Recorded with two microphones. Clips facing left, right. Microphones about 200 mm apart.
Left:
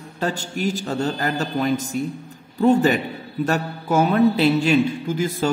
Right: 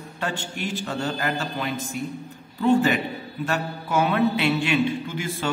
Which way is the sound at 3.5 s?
45° left (ahead or behind).